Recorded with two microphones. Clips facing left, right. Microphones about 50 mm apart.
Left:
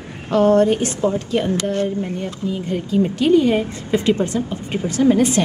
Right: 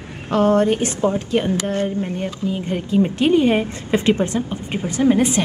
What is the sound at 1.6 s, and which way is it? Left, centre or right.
Speech, right.